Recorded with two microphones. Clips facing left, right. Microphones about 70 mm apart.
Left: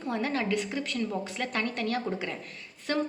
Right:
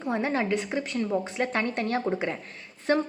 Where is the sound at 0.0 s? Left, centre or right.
Right.